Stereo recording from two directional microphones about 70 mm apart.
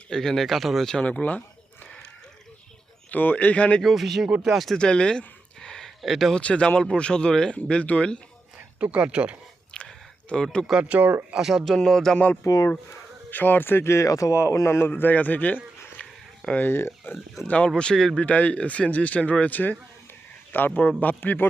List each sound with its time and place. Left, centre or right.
0.1 s speech: centre
1.0 s speech: left
3.1 s speech: left
3.8 s speech: centre
4.8 s a sound: centre
6.4 s speech: centre
8.8 s speech: centre
9.7 s a sound: centre
10.7 s speech: centre
11.3 s speech: centre
12.1 s speech: left
16.0 s a sound: centre
16.6 s speech: left
17.7 s speech: centre; by 21.4 s left